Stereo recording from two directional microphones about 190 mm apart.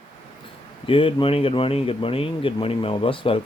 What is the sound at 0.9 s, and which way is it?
Speech, 30° left (ahead or behind).